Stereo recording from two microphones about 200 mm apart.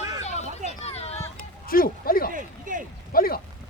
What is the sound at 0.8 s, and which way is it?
Speech, 30° left (ahead or behind).